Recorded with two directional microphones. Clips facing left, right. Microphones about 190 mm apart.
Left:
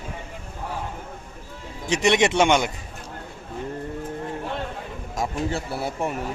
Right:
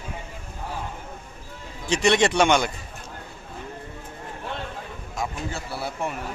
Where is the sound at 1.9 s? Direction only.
20° left (ahead or behind).